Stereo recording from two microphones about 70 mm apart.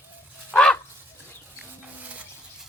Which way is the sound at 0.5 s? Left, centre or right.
Centre.